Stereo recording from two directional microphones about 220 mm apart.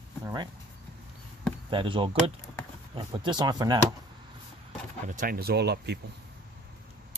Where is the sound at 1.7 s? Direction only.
20° right (ahead or behind).